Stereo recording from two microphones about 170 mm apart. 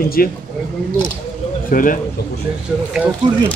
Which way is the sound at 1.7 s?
55° left (ahead or behind).